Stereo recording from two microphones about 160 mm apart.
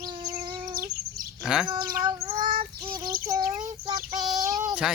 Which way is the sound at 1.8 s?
65° right (ahead or behind).